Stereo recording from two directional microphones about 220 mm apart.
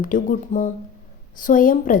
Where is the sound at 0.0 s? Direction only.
40° left (ahead or behind).